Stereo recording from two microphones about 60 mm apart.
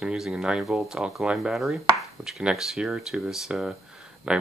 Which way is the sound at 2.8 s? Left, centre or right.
Centre.